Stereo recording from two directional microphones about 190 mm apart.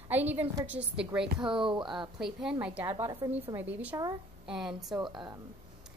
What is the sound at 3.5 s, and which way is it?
A woman's voice, 10° right (ahead or behind).